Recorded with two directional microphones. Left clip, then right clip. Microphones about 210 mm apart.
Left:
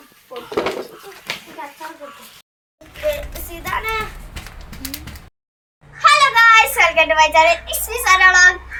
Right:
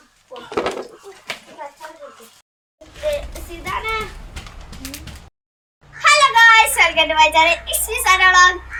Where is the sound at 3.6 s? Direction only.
45° left (ahead or behind).